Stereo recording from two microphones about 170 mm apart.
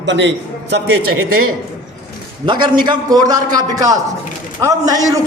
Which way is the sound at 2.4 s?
25° right (ahead or behind).